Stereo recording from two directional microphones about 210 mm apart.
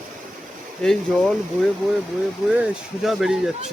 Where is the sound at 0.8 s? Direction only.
Centre (ahead or behind).